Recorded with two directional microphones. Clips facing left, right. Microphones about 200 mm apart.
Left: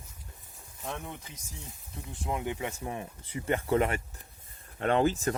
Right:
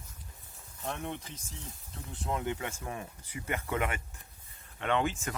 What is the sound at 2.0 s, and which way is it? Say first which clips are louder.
Speech: even; 15° left (ahead or behind).